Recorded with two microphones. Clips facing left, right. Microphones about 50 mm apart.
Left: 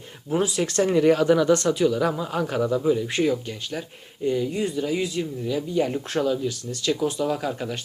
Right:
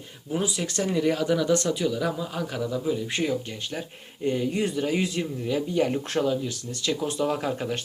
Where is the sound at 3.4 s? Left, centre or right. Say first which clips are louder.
Left 2 dB; centre.